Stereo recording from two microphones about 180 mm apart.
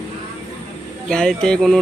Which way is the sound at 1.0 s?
5° left (ahead or behind).